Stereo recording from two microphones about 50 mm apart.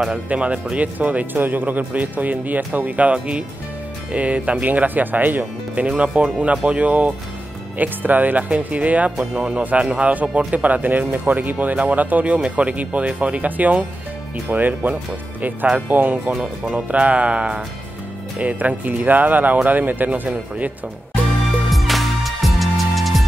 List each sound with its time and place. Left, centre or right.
0.1 s speech: right
9.3 s speech: centre
9.6 s speech: right
16.7 s speech: right
20.2 s speech: right
21.7 s music: centre